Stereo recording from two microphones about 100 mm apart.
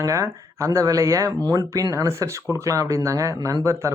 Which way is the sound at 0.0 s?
30° right (ahead or behind).